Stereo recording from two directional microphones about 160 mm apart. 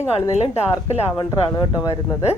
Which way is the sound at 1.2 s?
25° left (ahead or behind).